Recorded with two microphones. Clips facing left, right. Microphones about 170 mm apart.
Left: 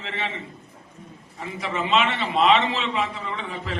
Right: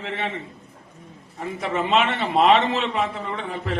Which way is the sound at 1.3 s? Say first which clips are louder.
Right 3 dB; 50° right (ahead or behind).